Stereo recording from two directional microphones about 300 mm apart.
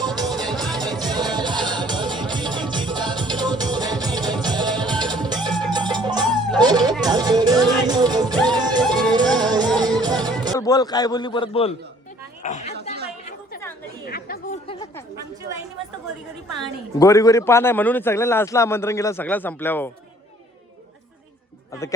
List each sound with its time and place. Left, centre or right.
0.2 s music: centre
10.6 s a man's voice: centre
12.4 s chatter: left
14.0 s chatter: left
14.7 s a sound: centre
17.0 s a man's voice: centre